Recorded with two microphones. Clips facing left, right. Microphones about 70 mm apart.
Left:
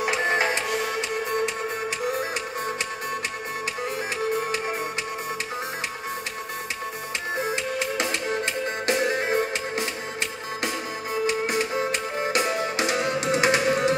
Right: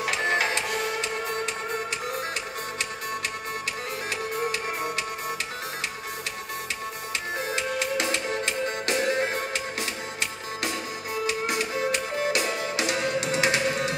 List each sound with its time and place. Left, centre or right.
0.0 s music: left
7.4 s music: left
11.2 s music: left